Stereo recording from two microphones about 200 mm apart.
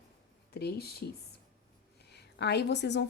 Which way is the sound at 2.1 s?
55° left (ahead or behind).